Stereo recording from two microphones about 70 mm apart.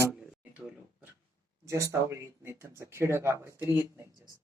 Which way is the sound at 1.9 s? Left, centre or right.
Right.